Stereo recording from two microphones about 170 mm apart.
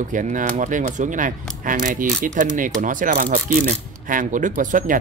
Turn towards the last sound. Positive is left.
turn(degrees=-50)  # may be behind; listen again after turning